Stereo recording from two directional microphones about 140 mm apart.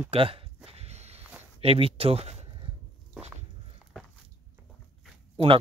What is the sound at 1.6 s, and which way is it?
Speech, 40° right (ahead or behind).